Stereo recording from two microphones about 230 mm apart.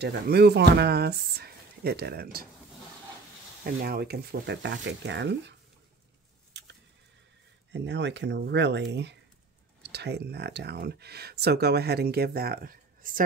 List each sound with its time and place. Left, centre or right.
0.0 s speech: right
3.6 s speech: right
7.7 s speech: right